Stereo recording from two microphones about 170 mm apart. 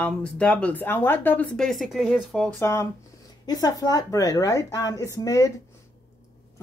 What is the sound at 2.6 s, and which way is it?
A woman's voice, 15° left (ahead or behind).